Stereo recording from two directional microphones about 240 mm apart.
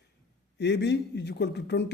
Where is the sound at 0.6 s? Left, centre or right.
Left.